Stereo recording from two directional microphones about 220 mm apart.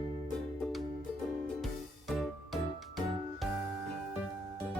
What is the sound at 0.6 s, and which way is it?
Music, centre (ahead or behind).